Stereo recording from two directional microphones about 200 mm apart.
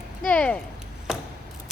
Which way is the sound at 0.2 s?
5° left (ahead or behind).